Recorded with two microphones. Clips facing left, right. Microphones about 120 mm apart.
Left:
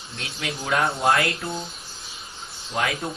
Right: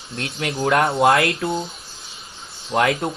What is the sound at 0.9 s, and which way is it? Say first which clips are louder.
Speech: right 5 dB; 70° right (ahead or behind).